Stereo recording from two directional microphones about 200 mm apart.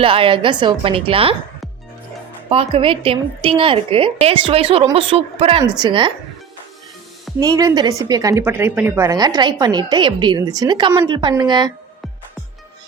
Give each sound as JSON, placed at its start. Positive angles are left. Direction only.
{"t": 0.0, "sound": "a woman's voice", "side_deg": -25}
{"t": 2.5, "sound": "a woman's voice", "side_deg": -25}
{"t": 7.3, "sound": "a woman's voice", "side_deg": -20}